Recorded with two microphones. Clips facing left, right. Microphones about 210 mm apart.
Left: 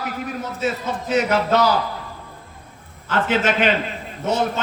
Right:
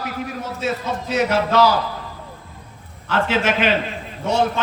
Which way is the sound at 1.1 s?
50° left (ahead or behind).